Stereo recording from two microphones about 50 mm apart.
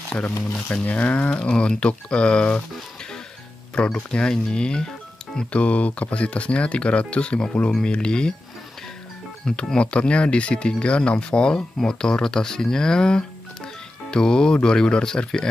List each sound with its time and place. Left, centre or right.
0.8 s speech: left
3.7 s speech: left
5.5 s speech: left
9.7 s speech: left